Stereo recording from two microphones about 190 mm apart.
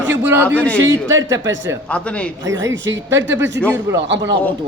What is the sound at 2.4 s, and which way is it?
Speech, 75° right (ahead or behind).